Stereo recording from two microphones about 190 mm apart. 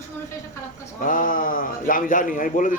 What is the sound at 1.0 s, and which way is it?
A man's voice, 45° left (ahead or behind).